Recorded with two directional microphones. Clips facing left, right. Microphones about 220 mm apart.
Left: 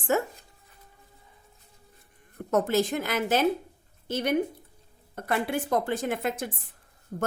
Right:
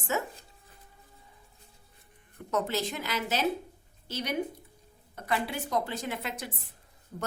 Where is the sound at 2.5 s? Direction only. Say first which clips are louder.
Left 6 dB; 50° left (ahead or behind).